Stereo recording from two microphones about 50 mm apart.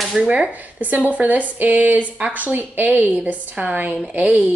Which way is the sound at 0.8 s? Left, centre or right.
Right.